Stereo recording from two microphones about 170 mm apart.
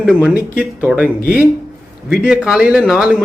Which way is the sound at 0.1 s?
10° right (ahead or behind).